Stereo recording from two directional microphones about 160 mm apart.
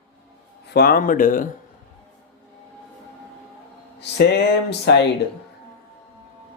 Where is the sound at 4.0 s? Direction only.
90° left.